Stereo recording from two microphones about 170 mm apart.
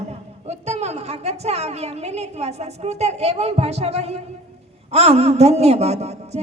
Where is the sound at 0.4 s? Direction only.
40° right (ahead or behind).